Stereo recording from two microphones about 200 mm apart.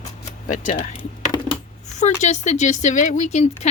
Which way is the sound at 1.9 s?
35° left (ahead or behind).